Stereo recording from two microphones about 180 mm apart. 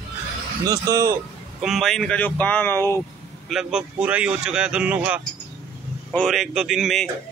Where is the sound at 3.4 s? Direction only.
5° right (ahead or behind).